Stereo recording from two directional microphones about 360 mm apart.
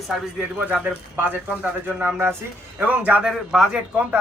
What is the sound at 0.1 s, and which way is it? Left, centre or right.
A man's voice, centre.